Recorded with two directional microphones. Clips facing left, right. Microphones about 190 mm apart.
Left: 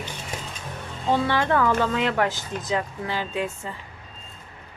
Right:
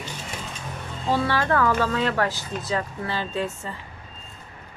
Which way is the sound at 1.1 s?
20° left (ahead or behind).